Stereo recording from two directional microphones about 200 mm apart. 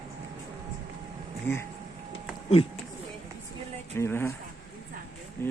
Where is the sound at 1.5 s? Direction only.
10° left (ahead or behind).